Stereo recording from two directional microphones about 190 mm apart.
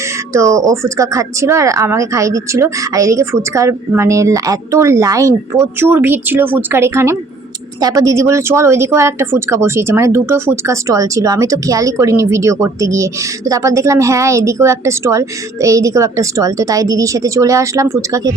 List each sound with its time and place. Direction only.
0.3 s speech: 15° right (ahead or behind)